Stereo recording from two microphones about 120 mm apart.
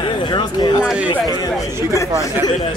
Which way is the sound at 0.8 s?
5° right (ahead or behind).